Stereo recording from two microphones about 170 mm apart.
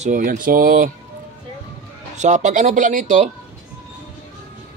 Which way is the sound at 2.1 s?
45° right (ahead or behind).